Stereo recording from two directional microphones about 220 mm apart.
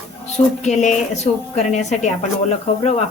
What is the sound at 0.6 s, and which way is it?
Speech, 30° left (ahead or behind).